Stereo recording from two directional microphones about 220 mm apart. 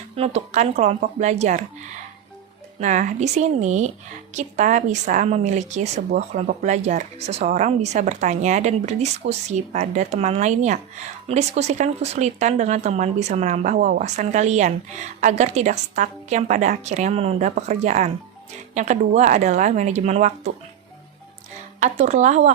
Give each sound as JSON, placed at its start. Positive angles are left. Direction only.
{"t": 0.2, "sound": "speech", "side_deg": -30}
{"t": 2.8, "sound": "speech", "side_deg": -35}
{"t": 21.8, "sound": "speech", "side_deg": -30}